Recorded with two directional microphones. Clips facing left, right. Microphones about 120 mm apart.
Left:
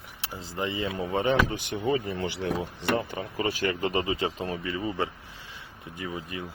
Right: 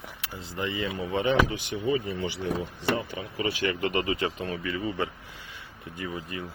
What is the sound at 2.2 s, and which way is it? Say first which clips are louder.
Speech: left 1 dB; 65° left (ahead or behind).